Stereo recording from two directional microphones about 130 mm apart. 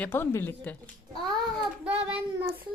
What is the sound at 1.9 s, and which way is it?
Speech, 45° right (ahead or behind).